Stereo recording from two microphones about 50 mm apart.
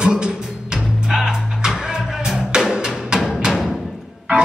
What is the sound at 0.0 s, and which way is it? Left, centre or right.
Music, centre.